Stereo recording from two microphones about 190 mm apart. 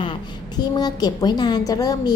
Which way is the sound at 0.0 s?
25° left (ahead or behind).